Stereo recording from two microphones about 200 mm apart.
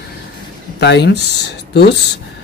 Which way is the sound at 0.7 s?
60° left (ahead or behind).